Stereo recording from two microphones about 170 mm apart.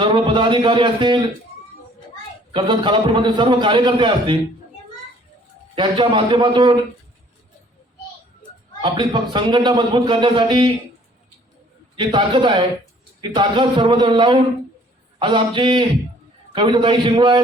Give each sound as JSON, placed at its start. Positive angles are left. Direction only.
{"t": 0.0, "sound": "a man's voice", "side_deg": -30}
{"t": 2.5, "sound": "a man's voice", "side_deg": -30}
{"t": 5.7, "sound": "a man's voice", "side_deg": -30}
{"t": 8.8, "sound": "a man's voice", "side_deg": -30}
{"t": 11.9, "sound": "a man's voice", "side_deg": -30}